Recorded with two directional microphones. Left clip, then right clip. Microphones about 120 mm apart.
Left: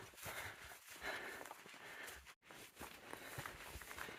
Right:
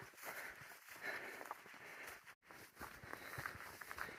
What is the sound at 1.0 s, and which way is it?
Walk, 25° left (ahead or behind).